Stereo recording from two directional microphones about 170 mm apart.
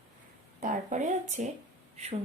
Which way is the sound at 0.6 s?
50° right (ahead or behind).